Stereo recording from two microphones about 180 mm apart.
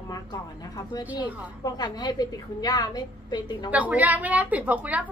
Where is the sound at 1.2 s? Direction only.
25° left (ahead or behind).